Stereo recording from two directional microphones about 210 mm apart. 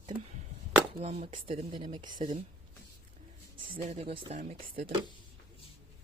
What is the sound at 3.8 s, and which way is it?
Speech, 30° right (ahead or behind).